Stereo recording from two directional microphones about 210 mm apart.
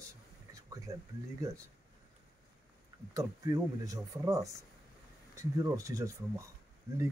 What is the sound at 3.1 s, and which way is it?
Speech, 15° right (ahead or behind).